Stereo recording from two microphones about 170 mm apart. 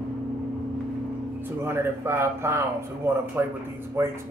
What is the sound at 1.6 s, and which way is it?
A man's voice, 15° right (ahead or behind).